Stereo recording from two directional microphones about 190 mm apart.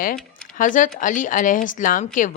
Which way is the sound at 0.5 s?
45° left (ahead or behind).